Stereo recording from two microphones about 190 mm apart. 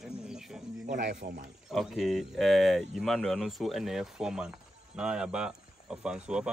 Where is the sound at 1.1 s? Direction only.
50° right (ahead or behind).